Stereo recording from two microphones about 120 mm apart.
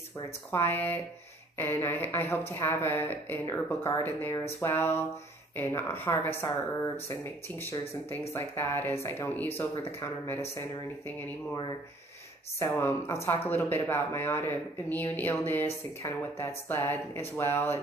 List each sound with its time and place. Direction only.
0.5 s speech: 20° left (ahead or behind)
12.5 s speech: 25° left (ahead or behind)